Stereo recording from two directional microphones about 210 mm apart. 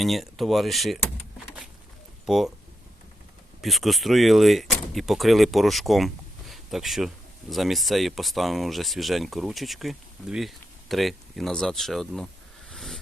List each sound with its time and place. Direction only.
0.0 s speech: centre (ahead or behind)
2.2 s speech: centre (ahead or behind)
3.6 s speech: centre (ahead or behind)
6.5 s a sound: centre (ahead or behind)
7.5 s speech: centre (ahead or behind)
12.7 s vehicle: centre (ahead or behind)